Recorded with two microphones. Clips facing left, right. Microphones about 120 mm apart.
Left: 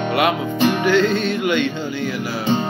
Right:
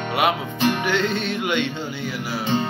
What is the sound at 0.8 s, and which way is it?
Music, 25° right (ahead or behind).